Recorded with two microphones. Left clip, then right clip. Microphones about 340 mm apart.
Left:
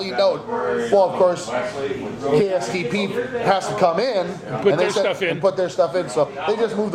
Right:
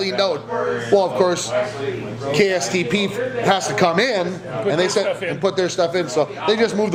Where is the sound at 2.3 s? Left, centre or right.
Right.